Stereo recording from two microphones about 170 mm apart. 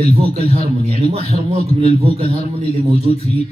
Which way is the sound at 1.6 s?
35° left (ahead or behind).